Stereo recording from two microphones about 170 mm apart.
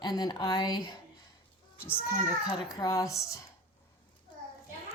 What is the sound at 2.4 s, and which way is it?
Speech, 5° right (ahead or behind).